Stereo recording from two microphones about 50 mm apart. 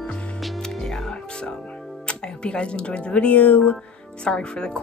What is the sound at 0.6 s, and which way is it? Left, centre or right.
Music, centre.